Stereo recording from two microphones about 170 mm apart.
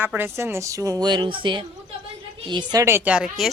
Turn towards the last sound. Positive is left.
turn(degrees=-5)  # may be behind; listen again after turning